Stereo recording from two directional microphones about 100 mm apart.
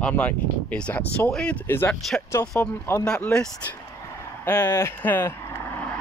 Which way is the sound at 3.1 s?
10° left (ahead or behind).